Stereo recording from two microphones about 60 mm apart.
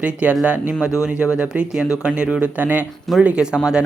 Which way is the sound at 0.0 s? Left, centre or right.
Right.